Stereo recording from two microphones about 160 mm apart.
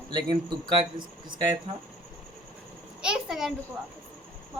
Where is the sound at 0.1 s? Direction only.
30° right (ahead or behind).